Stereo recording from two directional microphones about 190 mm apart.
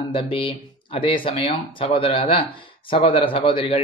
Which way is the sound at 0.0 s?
30° left (ahead or behind).